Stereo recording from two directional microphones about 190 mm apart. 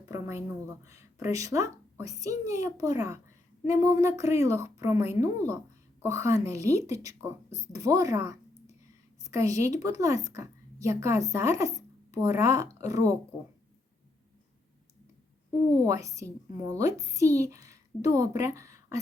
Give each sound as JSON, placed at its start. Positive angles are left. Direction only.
{"t": 0.0, "sound": "a woman's voice", "side_deg": -15}
{"t": 15.9, "sound": "a woman's voice", "side_deg": -15}